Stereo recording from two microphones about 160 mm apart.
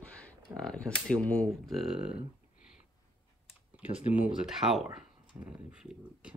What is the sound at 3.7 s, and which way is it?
Speech, 10° right (ahead or behind).